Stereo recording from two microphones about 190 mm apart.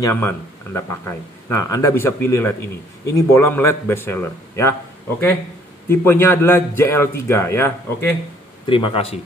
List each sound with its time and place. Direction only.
0.0 s a man's voice: 10° left (ahead or behind)
5.9 s a man's voice: 10° left (ahead or behind)
8.6 s a man's voice: 30° left (ahead or behind)